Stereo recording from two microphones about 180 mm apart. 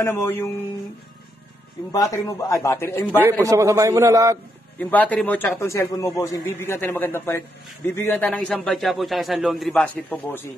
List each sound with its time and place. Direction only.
0.0 s a man's voice: 10° left (ahead or behind)
1.9 s a man's voice: 20° left (ahead or behind)
3.3 s a man's voice: 15° right (ahead or behind)
4.7 s a man's voice: 10° left (ahead or behind)